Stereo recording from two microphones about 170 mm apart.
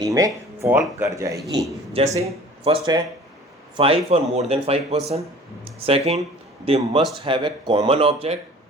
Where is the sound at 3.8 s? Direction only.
35° right (ahead or behind).